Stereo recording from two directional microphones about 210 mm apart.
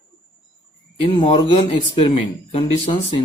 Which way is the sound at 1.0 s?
20° left (ahead or behind).